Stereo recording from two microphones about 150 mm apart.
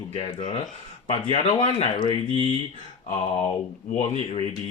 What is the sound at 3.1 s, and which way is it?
Speech, 40° left (ahead or behind).